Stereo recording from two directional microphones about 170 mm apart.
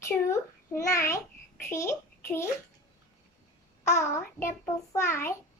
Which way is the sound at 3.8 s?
15° left (ahead or behind).